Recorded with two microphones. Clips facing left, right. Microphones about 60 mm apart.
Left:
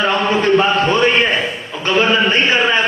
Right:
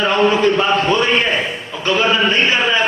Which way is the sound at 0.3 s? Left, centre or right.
Left.